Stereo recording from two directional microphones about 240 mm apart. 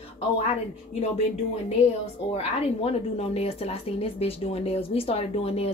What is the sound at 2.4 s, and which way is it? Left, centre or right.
A woman's voice, left.